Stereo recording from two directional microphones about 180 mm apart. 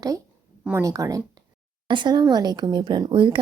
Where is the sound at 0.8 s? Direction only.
20° right (ahead or behind).